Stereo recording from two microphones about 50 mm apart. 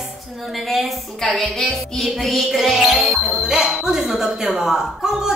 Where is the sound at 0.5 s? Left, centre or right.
Centre.